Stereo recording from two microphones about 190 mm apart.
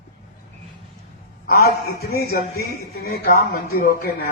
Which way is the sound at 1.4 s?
55° left (ahead or behind).